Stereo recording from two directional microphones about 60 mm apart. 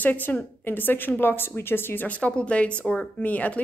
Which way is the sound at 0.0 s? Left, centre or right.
Left.